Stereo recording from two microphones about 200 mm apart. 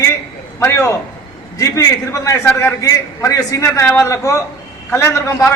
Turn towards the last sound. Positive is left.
turn(degrees=15)  # may be behind; listen again after turning